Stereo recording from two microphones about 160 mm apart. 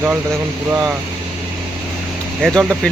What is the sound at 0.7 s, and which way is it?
Speech, 10° right (ahead or behind).